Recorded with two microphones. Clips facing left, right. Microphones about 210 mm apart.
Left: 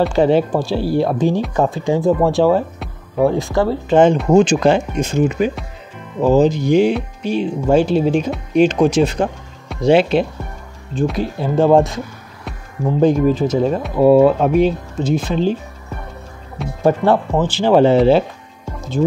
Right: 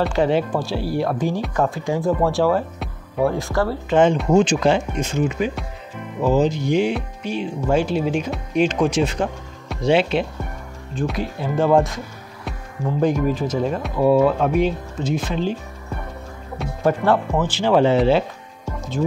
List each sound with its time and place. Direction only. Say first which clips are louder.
0.1 s speech: left 5 dB; 35° left (ahead or behind)
3.9 s speech: left 4 dB; 40° left (ahead or behind)
11.0 s speech: left 5 dB; 30° left (ahead or behind)
16.8 s speech: left 4 dB; 25° left (ahead or behind)